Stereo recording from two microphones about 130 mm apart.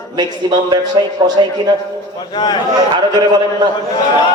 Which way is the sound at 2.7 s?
35° right (ahead or behind).